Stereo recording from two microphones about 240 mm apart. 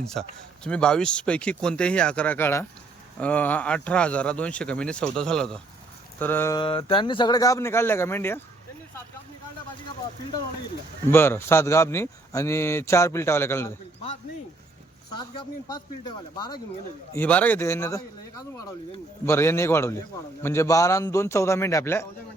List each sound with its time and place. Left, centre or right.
0.0 s a man's voice: centre
11.1 s a man's voice: centre
15.1 s speech: centre
17.1 s a man's voice: centre